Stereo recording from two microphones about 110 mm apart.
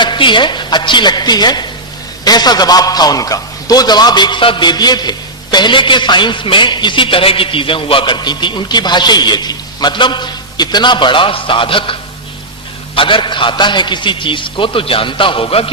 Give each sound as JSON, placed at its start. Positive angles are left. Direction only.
{"t": 0.0, "sound": "a man's voice", "side_deg": 45}
{"t": 13.0, "sound": "a man's voice", "side_deg": 50}